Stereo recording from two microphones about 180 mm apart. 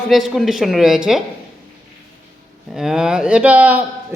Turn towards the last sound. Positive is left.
turn(degrees=-10)  # may be behind; listen again after turning